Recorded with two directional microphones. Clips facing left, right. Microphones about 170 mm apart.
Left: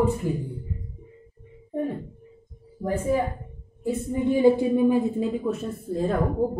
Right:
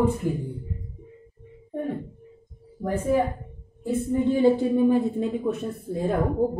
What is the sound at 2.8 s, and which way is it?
Speech, 5° right (ahead or behind).